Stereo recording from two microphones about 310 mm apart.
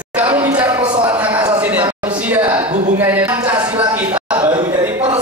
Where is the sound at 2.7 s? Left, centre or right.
Right.